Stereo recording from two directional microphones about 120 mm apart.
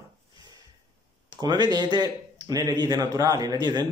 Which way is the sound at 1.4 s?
35° right (ahead or behind).